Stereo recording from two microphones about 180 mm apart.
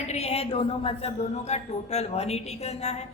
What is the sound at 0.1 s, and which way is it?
A woman's voice, 35° left (ahead or behind).